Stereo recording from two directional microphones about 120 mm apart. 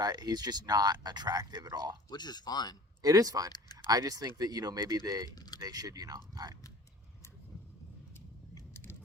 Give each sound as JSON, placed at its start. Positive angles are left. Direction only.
{"t": 0.0, "sound": "speech", "side_deg": -35}
{"t": 2.0, "sound": "speech", "side_deg": 35}
{"t": 3.0, "sound": "speech", "side_deg": -30}
{"t": 3.5, "sound": "a sound", "side_deg": 35}
{"t": 3.8, "sound": "speech", "side_deg": -30}
{"t": 8.7, "sound": "a sound", "side_deg": 20}